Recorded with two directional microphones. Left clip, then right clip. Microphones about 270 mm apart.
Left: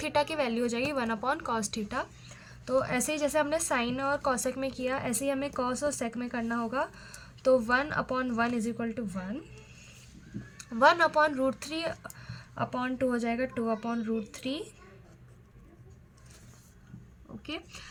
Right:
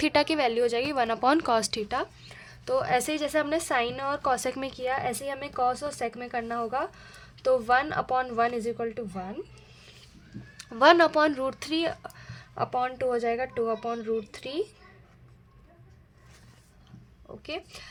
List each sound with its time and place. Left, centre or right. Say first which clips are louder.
0.0 s a woman's voice: right 5 dB; right
10.8 s a woman's voice: right 3 dB; right
17.4 s a woman's voice: right 3 dB; right